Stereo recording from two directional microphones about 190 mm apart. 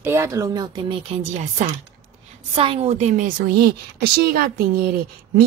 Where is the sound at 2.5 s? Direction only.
30° right (ahead or behind); by 4.1 s 50° right (ahead or behind).